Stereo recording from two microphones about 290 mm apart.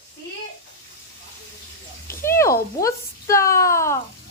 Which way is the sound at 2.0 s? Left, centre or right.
Centre.